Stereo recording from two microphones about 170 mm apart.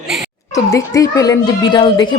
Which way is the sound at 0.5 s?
20° left (ahead or behind).